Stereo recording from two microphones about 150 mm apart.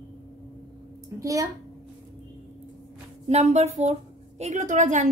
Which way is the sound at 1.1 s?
20° right (ahead or behind).